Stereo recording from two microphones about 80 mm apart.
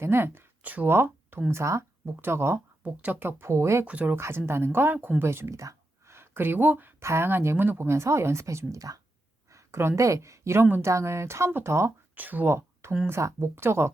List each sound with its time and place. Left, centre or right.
0.0 s a woman's voice: right
2.8 s speech: right
3.8 s speech: right
4.2 s a woman's voice: right
12.1 s speech: right
13.1 s a woman's voice: right